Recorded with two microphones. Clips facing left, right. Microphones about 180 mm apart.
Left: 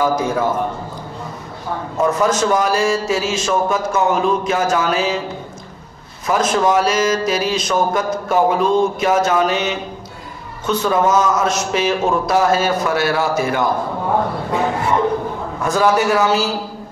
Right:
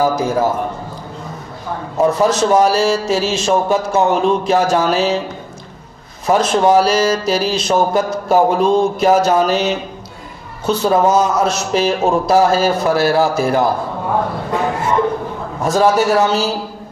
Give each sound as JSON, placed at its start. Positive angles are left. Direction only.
{"t": 0.0, "sound": "speech", "side_deg": -35}
{"t": 2.0, "sound": "speech", "side_deg": -35}
{"t": 6.2, "sound": "speech", "side_deg": -30}
{"t": 15.6, "sound": "speech", "side_deg": -35}